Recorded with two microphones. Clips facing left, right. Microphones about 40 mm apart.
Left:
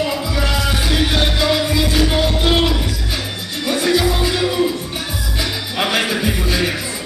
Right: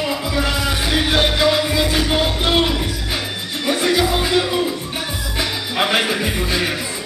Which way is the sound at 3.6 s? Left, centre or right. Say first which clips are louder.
Left 1 dB; centre.